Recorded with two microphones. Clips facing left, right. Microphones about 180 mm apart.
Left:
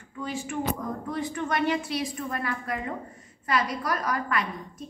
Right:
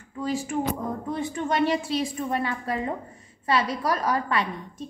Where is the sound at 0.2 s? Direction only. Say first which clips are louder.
Right 5 dB; 35° right (ahead or behind).